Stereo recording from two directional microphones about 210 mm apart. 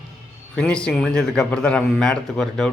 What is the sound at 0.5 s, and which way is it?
A man's voice, 5° left (ahead or behind).